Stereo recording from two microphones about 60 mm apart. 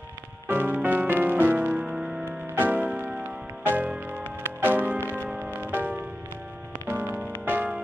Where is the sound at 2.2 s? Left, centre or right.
Right.